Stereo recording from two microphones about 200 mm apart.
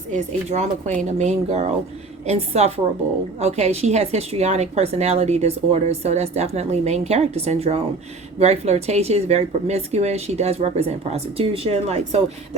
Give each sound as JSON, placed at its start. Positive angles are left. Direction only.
{"t": 0.1, "sound": "a woman's voice", "side_deg": -35}